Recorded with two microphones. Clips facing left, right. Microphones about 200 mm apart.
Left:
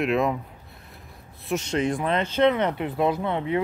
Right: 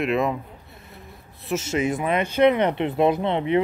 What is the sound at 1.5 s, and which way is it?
Speech, 5° right (ahead or behind).